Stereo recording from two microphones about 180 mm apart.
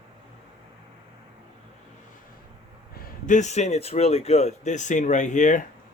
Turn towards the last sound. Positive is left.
turn(degrees=45)  # may be behind; listen again after turning